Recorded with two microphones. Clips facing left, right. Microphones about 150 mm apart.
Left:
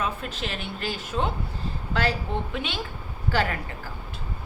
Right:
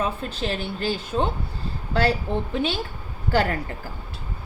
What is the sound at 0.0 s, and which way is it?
A woman's voice, 30° right (ahead or behind).